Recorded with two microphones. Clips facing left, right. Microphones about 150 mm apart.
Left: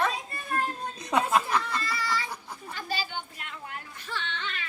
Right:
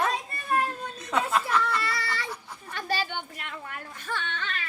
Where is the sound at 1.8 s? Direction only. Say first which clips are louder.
Even; 70° right (ahead or behind).